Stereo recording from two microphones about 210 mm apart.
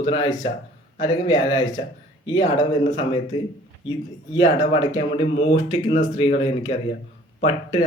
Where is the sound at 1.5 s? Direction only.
15° left (ahead or behind).